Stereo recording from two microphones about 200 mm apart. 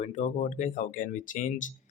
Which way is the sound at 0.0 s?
35° left (ahead or behind).